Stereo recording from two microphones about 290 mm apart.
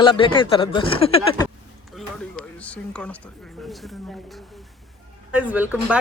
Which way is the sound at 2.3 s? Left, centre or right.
Centre.